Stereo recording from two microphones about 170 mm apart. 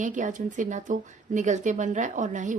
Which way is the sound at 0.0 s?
50° right (ahead or behind).